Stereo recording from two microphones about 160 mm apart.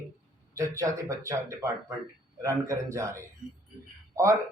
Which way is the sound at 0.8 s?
20° right (ahead or behind).